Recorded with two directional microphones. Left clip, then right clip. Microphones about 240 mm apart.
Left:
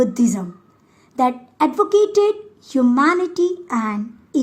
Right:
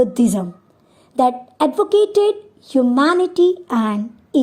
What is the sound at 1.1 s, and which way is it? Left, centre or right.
A woman's voice, centre.